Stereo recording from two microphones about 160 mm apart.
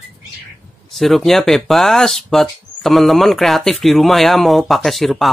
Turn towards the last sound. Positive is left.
turn(degrees=0)  # may be behind; listen again after turning